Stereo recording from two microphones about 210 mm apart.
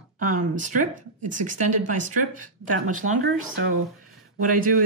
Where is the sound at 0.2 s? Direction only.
35° right (ahead or behind).